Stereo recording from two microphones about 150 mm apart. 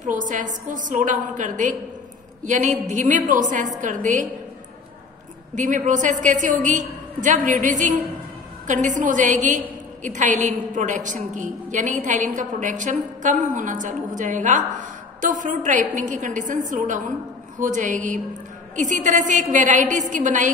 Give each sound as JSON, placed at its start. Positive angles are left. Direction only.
{"t": 0.0, "sound": "a woman's voice", "side_deg": -60}
{"t": 5.6, "sound": "a woman's voice", "side_deg": -60}